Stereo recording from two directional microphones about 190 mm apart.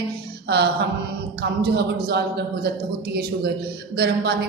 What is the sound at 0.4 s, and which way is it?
A woman's voice, 60° right (ahead or behind).